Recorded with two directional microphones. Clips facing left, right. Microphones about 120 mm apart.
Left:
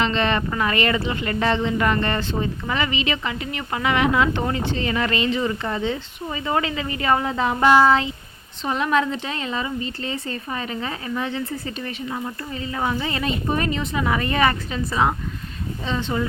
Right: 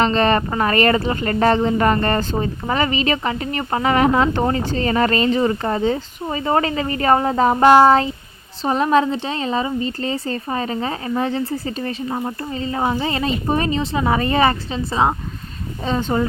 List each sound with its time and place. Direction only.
0.0 s speech: 40° right (ahead or behind)
15.8 s speech: 40° right (ahead or behind)